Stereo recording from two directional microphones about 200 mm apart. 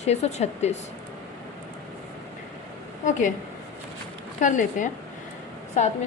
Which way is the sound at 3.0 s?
40° left (ahead or behind).